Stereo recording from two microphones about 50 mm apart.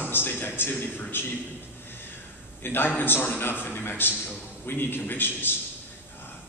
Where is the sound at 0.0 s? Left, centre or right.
Left.